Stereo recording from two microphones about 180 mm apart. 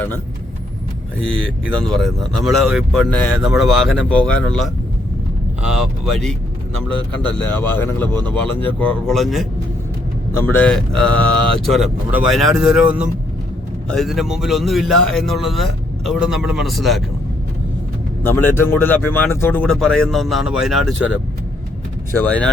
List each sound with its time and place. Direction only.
1.2 s a man's voice: 5° left (ahead or behind)
7.3 s a man's voice: 10° left (ahead or behind)
18.2 s speech: 10° left (ahead or behind)
22.2 s speech: 5° left (ahead or behind)